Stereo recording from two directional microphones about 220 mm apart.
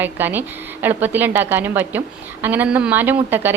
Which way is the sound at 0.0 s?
10° right (ahead or behind).